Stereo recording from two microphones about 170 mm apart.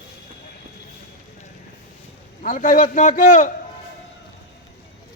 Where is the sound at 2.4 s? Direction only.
50° left (ahead or behind).